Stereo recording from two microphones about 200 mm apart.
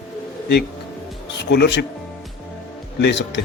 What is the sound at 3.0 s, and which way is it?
Speech, 65° left (ahead or behind).